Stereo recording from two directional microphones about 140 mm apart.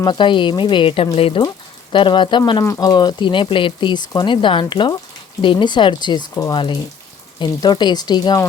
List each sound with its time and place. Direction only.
0.0 s speech: 35° left (ahead or behind)
1.4 s speech: 30° left (ahead or behind)
2.6 s speech: 20° left (ahead or behind)
2.9 s speech: 30° left (ahead or behind)